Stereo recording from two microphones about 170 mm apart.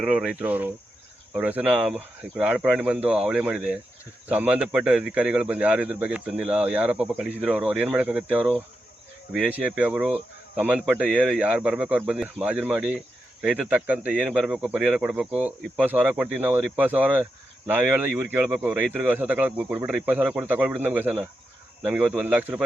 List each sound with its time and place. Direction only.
0.0 s speech: 5° right (ahead or behind)